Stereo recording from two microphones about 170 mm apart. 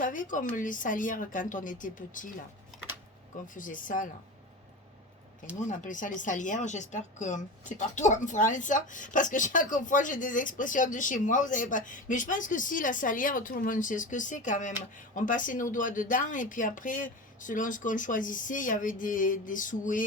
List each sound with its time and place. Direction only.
0.0 s speech: 50° left (ahead or behind)
3.4 s speech: 50° left (ahead or behind)
5.5 s speech: 45° left (ahead or behind)